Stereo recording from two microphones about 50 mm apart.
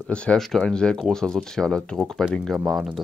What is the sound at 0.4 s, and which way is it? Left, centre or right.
Speech, centre.